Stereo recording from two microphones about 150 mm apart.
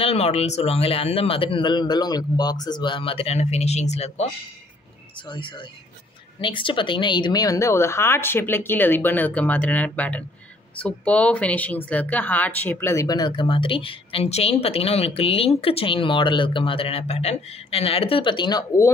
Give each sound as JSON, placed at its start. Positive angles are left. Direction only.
{"t": 0.0, "sound": "speech", "side_deg": 45}
{"t": 5.3, "sound": "speech", "side_deg": 35}